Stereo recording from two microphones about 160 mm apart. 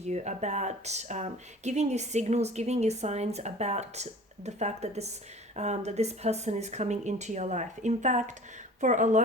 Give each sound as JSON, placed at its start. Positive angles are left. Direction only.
{"t": 0.1, "sound": "speech", "side_deg": -45}